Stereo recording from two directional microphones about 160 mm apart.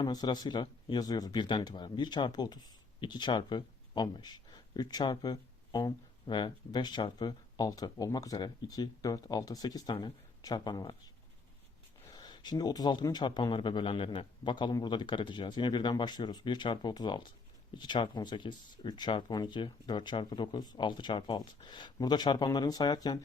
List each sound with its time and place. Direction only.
0.0 s speech: 25° left (ahead or behind)
12.1 s speech: 25° left (ahead or behind)